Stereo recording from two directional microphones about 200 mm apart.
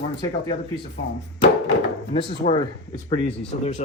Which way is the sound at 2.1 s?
25° left (ahead or behind).